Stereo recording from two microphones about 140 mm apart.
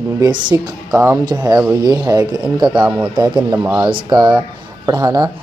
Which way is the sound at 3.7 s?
35° right (ahead or behind).